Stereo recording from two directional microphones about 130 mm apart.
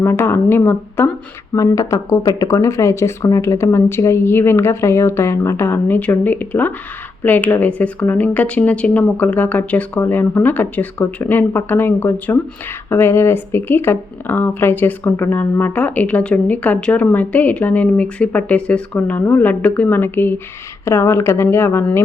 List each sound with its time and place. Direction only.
0.0 s speech: 20° left (ahead or behind)